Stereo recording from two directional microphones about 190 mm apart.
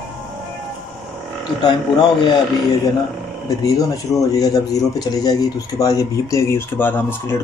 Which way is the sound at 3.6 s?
15° left (ahead or behind).